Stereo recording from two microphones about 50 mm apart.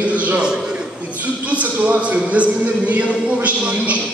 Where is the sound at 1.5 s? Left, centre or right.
Right.